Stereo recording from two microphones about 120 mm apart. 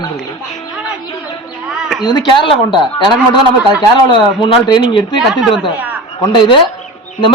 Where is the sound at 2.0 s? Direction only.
35° left (ahead or behind).